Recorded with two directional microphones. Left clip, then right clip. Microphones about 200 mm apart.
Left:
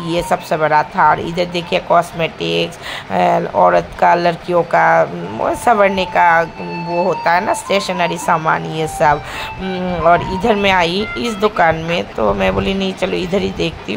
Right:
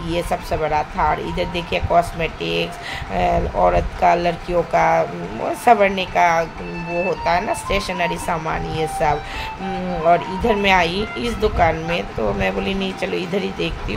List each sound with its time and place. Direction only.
0.1 s speech: 25° left (ahead or behind)